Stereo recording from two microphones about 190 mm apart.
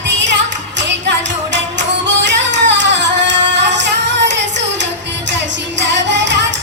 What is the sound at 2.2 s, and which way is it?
Singing, 70° right (ahead or behind).